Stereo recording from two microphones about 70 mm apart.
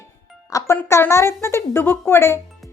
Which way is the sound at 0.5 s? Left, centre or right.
Left.